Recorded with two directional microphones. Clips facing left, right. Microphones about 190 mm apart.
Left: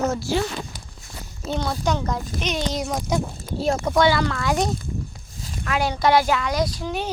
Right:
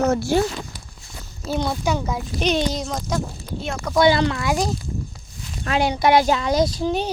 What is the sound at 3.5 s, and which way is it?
Speech, 35° left (ahead or behind).